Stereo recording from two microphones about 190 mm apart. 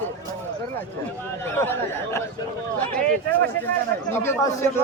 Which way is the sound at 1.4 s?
10° left (ahead or behind).